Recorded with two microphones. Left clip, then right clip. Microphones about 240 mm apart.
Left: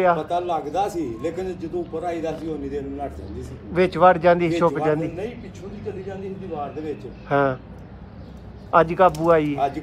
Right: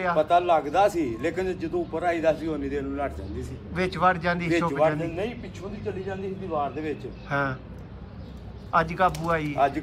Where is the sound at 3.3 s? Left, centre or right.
Centre.